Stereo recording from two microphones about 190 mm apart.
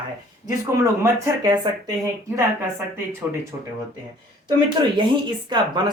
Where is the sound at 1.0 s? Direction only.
20° right (ahead or behind).